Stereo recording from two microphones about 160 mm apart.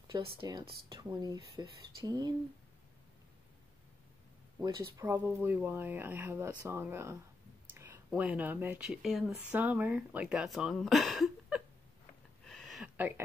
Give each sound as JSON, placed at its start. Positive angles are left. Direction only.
{"t": 0.4, "sound": "speech", "side_deg": -30}
{"t": 4.6, "sound": "speech", "side_deg": -20}
{"t": 12.4, "sound": "a sound", "side_deg": 0}
{"t": 12.9, "sound": "speech", "side_deg": -10}